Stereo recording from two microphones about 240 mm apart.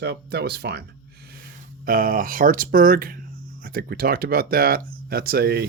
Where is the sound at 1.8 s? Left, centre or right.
Right.